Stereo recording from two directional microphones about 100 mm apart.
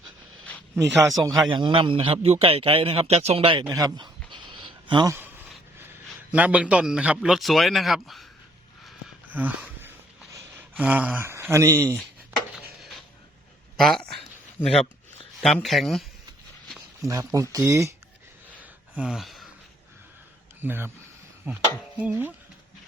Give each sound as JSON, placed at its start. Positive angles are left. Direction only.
{"t": 0.8, "sound": "speech", "side_deg": -30}
{"t": 1.5, "sound": "a man's voice", "side_deg": -55}
{"t": 2.2, "sound": "a man's voice", "side_deg": -75}
{"t": 3.7, "sound": "speech", "side_deg": -40}
{"t": 4.3, "sound": "a sound", "side_deg": -55}
{"t": 6.3, "sound": "a man's voice", "side_deg": -15}
{"t": 10.6, "sound": "a sound", "side_deg": -15}
{"t": 11.2, "sound": "speech", "side_deg": -25}
{"t": 13.7, "sound": "a man's voice", "side_deg": 5}
{"t": 17.0, "sound": "speech", "side_deg": -35}
{"t": 18.6, "sound": "a sound", "side_deg": -10}
{"t": 20.6, "sound": "speech", "side_deg": -20}
{"t": 21.4, "sound": "chopping", "side_deg": -15}